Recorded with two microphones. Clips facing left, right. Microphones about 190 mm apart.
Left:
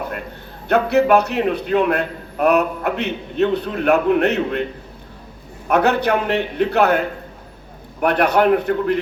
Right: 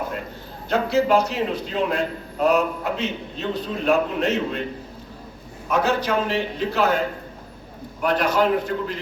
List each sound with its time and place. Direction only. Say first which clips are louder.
0.7 s a man's voice: left 4 dB; 60° left (ahead or behind)
5.6 s a man's voice: left 5 dB; 65° left (ahead or behind)
8.0 s a man's voice: left 4 dB; 65° left (ahead or behind)